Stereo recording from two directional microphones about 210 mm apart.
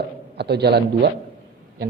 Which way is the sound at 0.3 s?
50° right (ahead or behind).